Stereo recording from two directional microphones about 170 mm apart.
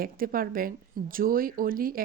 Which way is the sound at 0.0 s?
60° right (ahead or behind).